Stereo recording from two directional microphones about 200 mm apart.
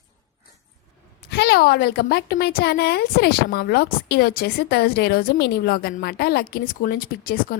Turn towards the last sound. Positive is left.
turn(degrees=45)  # may be behind; listen again after turning